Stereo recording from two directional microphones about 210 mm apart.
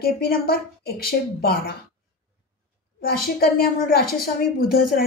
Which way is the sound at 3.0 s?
45° left (ahead or behind).